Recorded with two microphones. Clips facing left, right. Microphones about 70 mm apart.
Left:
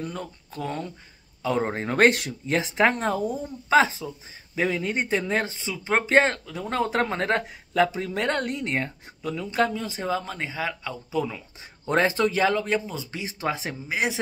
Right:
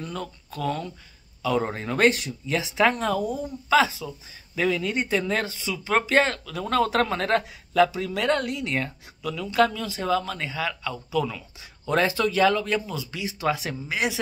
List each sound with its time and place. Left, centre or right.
0.0 s speech: left